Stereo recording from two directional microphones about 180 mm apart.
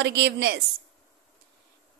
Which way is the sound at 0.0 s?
70° right (ahead or behind).